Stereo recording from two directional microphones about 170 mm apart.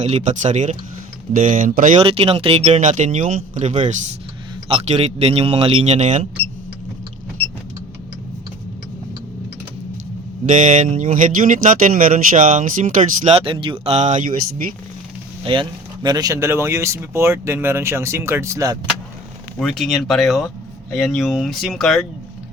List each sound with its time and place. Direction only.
0.0 s speech: 40° right (ahead or behind)
2.0 s speech: 35° right (ahead or behind)
10.5 s speech: 50° right (ahead or behind)
13.4 s speech: 30° right (ahead or behind); by 14.7 s 50° right (ahead or behind)
15.5 s speech: 35° right (ahead or behind)
16.0 s speech: 20° right (ahead or behind)
19.5 s speech: centre (ahead or behind)